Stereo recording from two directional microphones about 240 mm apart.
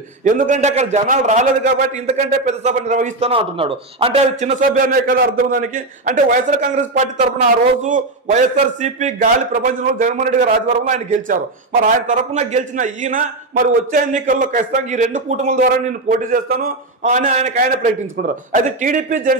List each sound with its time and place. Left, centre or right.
0.2 s a man's voice: right